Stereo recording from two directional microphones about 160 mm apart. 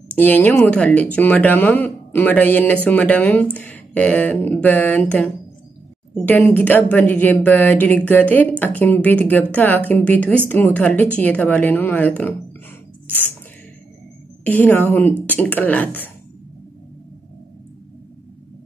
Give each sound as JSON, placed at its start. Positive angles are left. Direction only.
{"t": 0.1, "sound": "speech", "side_deg": 10}
{"t": 14.4, "sound": "speech", "side_deg": 10}